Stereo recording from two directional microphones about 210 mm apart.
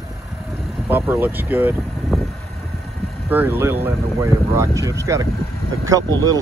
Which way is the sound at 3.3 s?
10° right (ahead or behind).